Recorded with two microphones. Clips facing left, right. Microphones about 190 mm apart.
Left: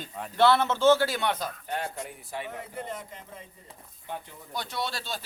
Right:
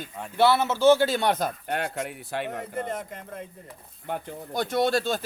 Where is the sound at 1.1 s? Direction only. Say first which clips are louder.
Right 5 dB; 35° right (ahead or behind).